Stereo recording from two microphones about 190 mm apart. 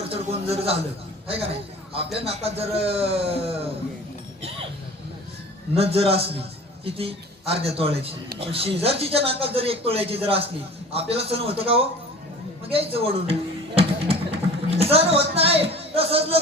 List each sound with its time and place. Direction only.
0.1 s a man's voice: 30° right (ahead or behind)
2.1 s speech: 30° right (ahead or behind)
5.7 s speech: 30° right (ahead or behind)
13.7 s music: 30° right (ahead or behind)